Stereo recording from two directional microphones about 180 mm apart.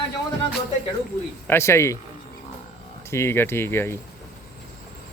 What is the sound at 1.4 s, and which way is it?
Speech, 15° left (ahead or behind).